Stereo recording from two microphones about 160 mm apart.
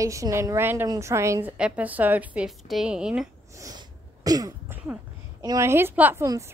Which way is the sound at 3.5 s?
20° right (ahead or behind).